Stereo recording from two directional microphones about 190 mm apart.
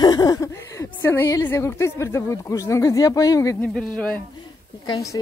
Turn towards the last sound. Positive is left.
turn(degrees=15)  # may be behind; listen again after turning